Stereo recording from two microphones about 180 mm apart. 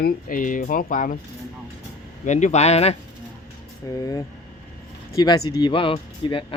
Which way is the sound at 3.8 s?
20° left (ahead or behind).